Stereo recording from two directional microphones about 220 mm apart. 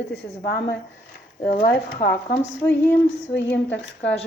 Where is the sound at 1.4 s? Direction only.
40° left (ahead or behind).